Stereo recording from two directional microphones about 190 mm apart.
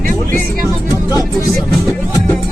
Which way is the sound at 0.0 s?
45° right (ahead or behind).